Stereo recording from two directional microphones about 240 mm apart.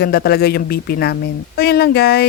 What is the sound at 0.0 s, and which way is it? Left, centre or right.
Speech, left.